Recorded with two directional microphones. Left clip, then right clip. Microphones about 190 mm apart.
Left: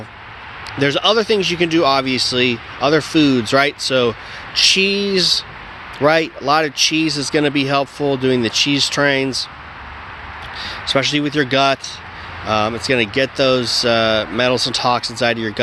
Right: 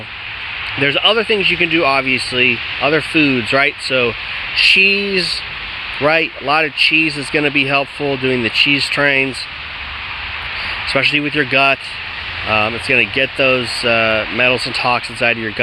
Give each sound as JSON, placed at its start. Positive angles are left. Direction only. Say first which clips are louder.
{"t": 0.8, "sound": "speech", "louder": "right 1 dB", "side_deg": 20}
{"t": 10.9, "sound": "speech", "louder": "right 2 dB", "side_deg": 20}